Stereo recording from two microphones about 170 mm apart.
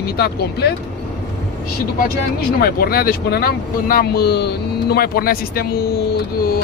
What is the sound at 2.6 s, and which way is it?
Speech, 60° left (ahead or behind).